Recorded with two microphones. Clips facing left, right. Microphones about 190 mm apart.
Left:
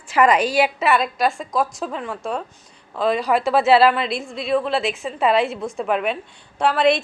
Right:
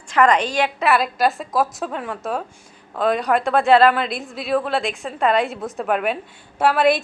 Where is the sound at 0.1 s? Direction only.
5° left (ahead or behind).